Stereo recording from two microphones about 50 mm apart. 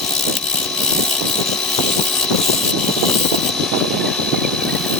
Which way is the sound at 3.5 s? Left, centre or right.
Centre.